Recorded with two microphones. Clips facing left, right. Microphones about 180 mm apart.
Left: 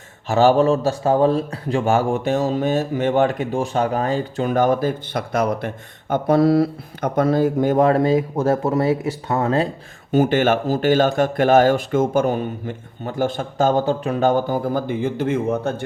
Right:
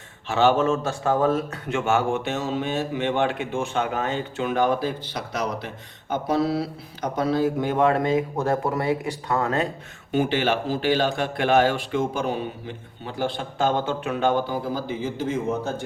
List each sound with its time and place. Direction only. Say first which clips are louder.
0.3 s speech: left 5 dB; 40° left (ahead or behind)
10.1 s speech: left 6 dB; 45° left (ahead or behind); by 15.7 s 60° left (ahead or behind)